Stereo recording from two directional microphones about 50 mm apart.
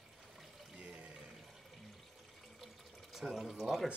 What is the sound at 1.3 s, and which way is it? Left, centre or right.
Toilet flush, centre.